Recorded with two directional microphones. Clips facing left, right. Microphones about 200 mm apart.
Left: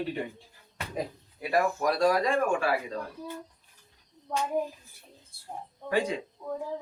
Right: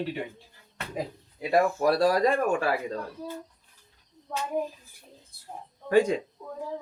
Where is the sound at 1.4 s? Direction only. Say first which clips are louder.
Right 3 dB; 25° right (ahead or behind).